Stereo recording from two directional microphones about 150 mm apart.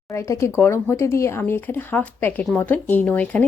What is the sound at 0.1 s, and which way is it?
Speech, 20° left (ahead or behind).